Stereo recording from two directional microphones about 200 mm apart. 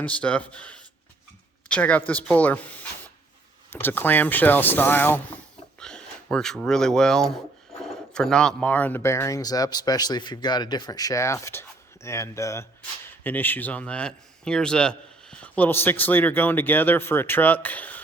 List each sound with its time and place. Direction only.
0.0 s a man's voice: 5° left (ahead or behind)
5.8 s a sound: 5° left (ahead or behind)
6.3 s a man's voice: 5° left (ahead or behind)